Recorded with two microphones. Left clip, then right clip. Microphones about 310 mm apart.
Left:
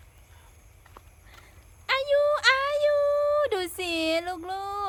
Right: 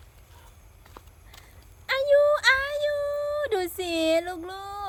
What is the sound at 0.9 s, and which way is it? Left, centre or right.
Horse, right.